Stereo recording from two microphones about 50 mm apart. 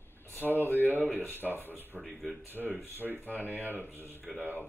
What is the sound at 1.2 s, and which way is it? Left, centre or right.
Speech, right.